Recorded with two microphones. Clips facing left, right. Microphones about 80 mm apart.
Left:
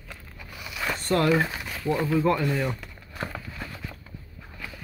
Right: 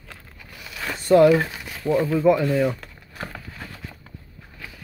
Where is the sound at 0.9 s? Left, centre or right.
Centre.